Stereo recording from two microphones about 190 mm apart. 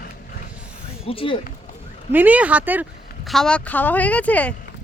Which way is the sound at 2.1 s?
10° right (ahead or behind).